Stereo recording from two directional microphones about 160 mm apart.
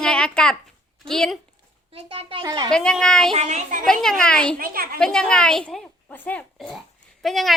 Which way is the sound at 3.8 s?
Centre (ahead or behind).